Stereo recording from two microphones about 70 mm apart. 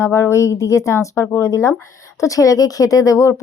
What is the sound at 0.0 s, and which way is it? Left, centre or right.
A woman's voice, left.